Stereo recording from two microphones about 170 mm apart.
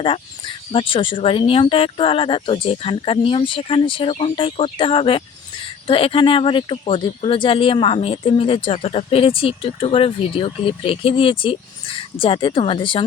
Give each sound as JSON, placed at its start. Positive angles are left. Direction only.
{"t": 0.0, "sound": "speech", "side_deg": 30}